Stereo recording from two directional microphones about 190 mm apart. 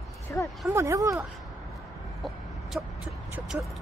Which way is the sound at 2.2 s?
Centre (ahead or behind).